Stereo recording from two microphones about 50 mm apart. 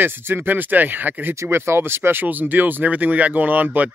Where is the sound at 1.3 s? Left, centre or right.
Right.